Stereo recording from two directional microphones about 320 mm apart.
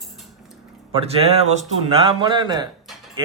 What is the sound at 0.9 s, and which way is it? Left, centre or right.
Speech, centre.